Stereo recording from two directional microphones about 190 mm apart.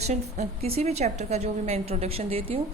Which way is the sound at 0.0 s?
35° right (ahead or behind).